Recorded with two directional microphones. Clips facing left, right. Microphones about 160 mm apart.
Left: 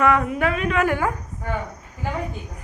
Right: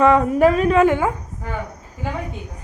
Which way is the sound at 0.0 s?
30° right (ahead or behind).